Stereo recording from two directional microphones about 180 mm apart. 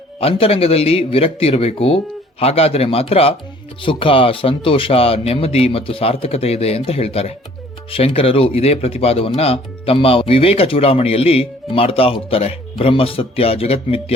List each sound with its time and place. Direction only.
0.2 s speech: 30° left (ahead or behind)